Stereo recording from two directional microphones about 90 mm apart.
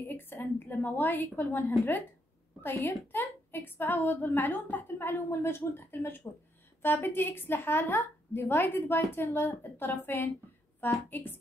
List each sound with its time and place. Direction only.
0.0 s a woman's voice: 20° left (ahead or behind)